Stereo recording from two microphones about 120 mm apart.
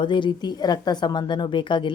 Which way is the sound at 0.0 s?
40° left (ahead or behind).